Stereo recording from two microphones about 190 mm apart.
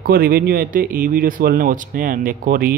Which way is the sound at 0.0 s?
55° right (ahead or behind).